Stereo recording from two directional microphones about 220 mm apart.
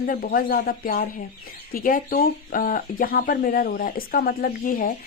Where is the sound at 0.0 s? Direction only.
40° left (ahead or behind).